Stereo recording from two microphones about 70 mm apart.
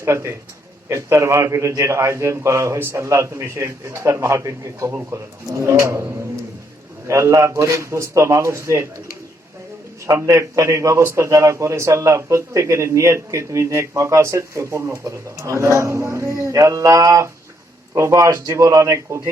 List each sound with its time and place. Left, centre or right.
0.0 s a man's voice: right
7.1 s a man's voice: right
10.1 s a man's voice: right